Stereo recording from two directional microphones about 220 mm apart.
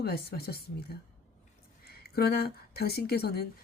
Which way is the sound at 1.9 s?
45° left (ahead or behind).